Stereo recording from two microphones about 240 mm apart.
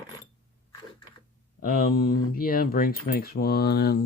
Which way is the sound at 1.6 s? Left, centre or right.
Left.